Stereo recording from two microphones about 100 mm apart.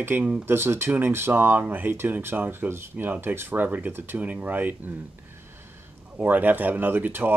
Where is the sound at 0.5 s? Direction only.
25° right (ahead or behind).